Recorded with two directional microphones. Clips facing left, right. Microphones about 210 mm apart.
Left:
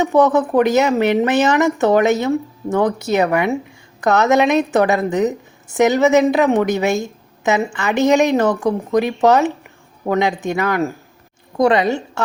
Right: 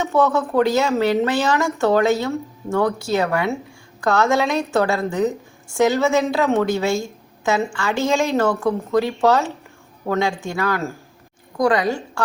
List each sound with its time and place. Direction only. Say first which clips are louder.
0.0 s a woman's voice: left 4 dB; 15° left (ahead or behind)